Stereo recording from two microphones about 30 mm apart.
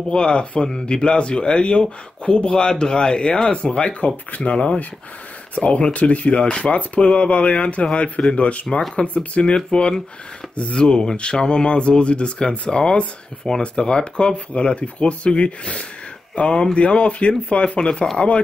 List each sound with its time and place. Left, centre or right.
0.1 s a man's voice: left
3.8 s speech: left
7.0 s speech: left
9.7 s a man's voice: left
12.4 s a man's voice: left
18.1 s speech: left